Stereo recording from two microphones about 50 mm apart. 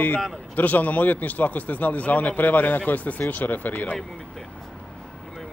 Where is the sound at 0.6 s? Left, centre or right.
Left.